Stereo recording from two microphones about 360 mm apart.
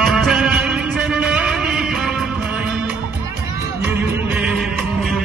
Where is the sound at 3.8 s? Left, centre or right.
Centre.